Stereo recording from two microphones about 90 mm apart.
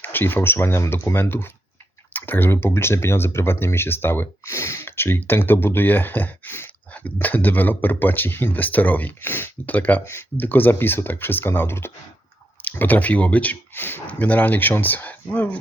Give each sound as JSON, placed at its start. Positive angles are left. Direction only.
{"t": 0.0, "sound": "speech", "side_deg": 20}